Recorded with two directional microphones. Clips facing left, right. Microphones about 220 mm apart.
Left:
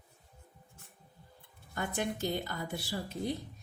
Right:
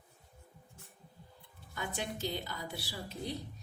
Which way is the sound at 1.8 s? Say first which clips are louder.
Left 4 dB; 50° left (ahead or behind).